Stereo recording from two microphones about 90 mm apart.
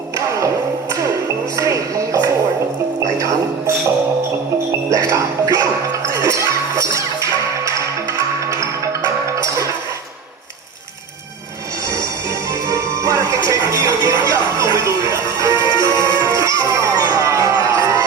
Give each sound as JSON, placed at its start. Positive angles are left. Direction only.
{"t": 1.5, "sound": "speech", "side_deg": -35}
{"t": 3.0, "sound": "speech", "side_deg": -35}
{"t": 4.9, "sound": "speech", "side_deg": -35}
{"t": 6.1, "sound": "music", "side_deg": -35}
{"t": 9.2, "sound": "music", "side_deg": -35}
{"t": 12.6, "sound": "music", "side_deg": -35}